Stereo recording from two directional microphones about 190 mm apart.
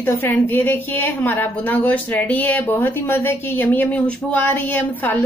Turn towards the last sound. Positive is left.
turn(degrees=10)  # may be behind; listen again after turning